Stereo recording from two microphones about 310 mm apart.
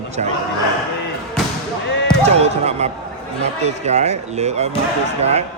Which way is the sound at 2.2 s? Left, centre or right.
Centre.